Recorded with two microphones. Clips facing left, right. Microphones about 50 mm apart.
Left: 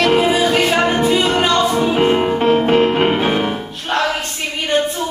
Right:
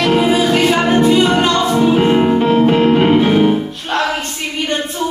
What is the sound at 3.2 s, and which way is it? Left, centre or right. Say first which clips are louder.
Music: right 5 dB; centre.